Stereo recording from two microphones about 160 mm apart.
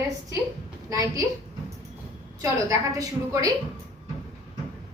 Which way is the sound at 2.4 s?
20° right (ahead or behind).